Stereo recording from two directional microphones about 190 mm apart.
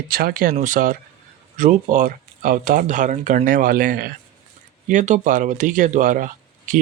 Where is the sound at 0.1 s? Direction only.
50° right (ahead or behind).